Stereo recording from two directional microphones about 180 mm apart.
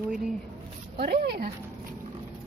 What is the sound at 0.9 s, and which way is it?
Speech, 60° right (ahead or behind).